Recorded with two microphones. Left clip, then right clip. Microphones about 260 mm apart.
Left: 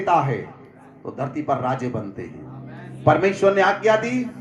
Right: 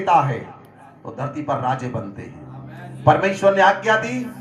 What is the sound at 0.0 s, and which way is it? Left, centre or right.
A man's voice, left.